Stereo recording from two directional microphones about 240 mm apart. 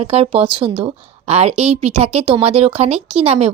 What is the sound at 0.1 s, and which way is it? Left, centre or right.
A woman's voice, right.